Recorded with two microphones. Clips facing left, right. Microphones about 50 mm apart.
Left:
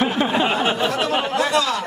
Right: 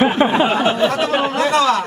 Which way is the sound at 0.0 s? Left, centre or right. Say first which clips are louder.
Right 5 dB; right.